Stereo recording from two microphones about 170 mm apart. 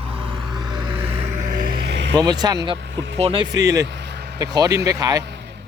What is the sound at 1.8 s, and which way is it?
Vehicle, 90° right.